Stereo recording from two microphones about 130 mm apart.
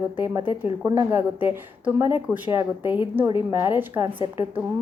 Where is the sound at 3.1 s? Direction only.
20° right (ahead or behind).